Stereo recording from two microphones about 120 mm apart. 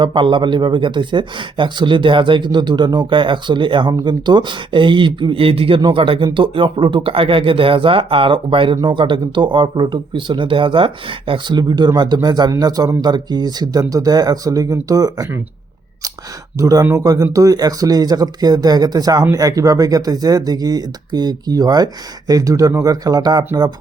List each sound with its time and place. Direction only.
0.0 s speech: 40° right (ahead or behind)
16.6 s speech: 30° right (ahead or behind)